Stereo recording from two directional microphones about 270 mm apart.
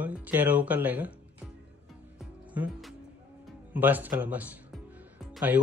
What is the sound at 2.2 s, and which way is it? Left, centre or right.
Music, centre.